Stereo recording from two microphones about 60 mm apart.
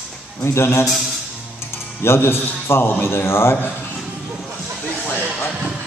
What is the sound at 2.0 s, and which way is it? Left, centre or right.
A man's voice, left.